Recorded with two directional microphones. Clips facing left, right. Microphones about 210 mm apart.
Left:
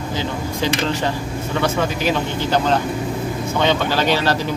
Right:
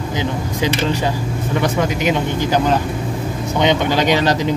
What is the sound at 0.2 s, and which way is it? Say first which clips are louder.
Speech: right 3 dB; 15° right (ahead or behind).